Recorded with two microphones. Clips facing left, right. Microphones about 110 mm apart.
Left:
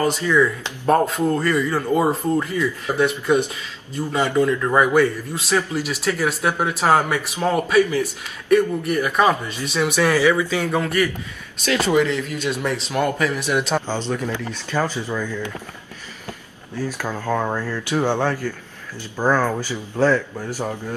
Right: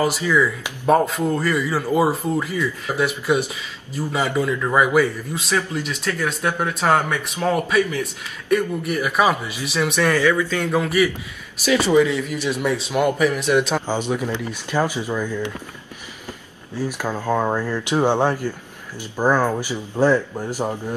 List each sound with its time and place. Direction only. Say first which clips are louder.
0.0 s speech: left 1 dB; 5° right (ahead or behind)
10.7 s speech: right 2 dB; 5° right (ahead or behind)
16.8 s speech: right 2 dB; 15° right (ahead or behind)